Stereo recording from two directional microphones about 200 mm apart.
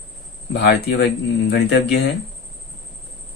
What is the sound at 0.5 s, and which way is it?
Speech, 55° left (ahead or behind).